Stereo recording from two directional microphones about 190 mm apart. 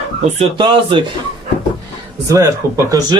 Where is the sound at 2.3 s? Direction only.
15° right (ahead or behind).